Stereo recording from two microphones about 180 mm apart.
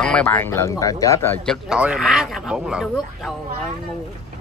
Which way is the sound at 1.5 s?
5° right (ahead or behind).